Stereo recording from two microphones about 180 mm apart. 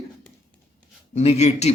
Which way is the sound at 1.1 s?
35° left (ahead or behind).